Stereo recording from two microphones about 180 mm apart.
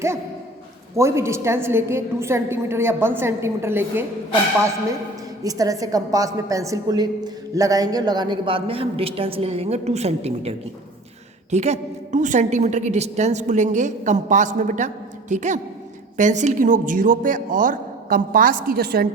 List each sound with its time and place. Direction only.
0.9 s a woman's voice: 15° right (ahead or behind)
5.4 s a woman's voice: 20° right (ahead or behind); by 10.5 s 35° right (ahead or behind)
11.5 s a woman's voice: 40° right (ahead or behind); by 19.0 s 60° right (ahead or behind)